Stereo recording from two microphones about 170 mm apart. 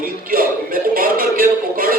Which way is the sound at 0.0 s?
55° right (ahead or behind).